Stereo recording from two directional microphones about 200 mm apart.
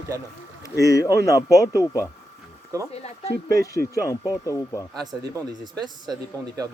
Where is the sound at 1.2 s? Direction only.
15° left (ahead or behind).